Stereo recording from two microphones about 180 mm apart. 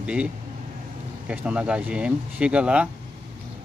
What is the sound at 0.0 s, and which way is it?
Speech, 5° right (ahead or behind).